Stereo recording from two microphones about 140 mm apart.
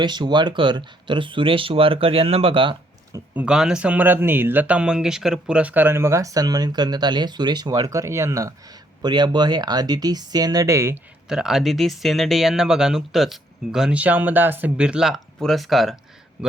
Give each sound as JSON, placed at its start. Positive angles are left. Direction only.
{"t": 0.0, "sound": "speech", "side_deg": -30}
{"t": 3.3, "sound": "speech", "side_deg": -5}
{"t": 11.3, "sound": "speech", "side_deg": -5}